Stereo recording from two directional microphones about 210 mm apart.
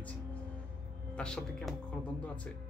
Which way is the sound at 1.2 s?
5° left (ahead or behind).